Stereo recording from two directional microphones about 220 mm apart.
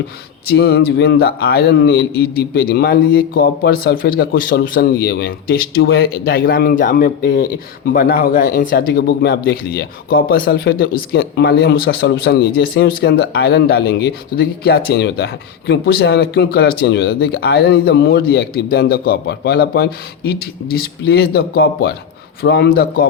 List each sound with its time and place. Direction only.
0.5 s a man's voice: 45° left (ahead or behind)